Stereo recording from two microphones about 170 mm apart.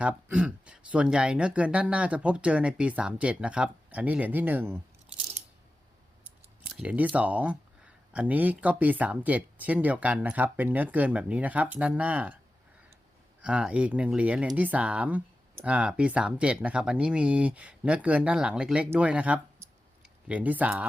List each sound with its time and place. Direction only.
0.0 s speech: 5° right (ahead or behind)
6.7 s speech: 5° right (ahead or behind)
13.4 s speech: 5° right (ahead or behind)